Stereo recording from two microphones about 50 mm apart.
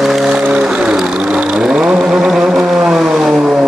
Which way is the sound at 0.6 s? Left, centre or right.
Centre.